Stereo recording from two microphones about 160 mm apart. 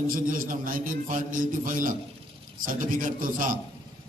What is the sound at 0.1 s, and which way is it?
A man's voice, 60° right (ahead or behind).